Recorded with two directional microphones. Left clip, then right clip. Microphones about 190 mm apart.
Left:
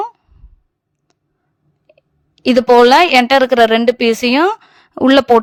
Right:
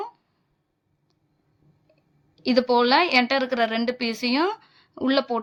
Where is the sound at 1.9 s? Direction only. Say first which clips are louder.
Left 14 dB; 50° left (ahead or behind).